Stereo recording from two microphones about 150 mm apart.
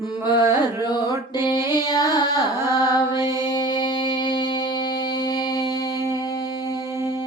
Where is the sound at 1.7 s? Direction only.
30° left (ahead or behind).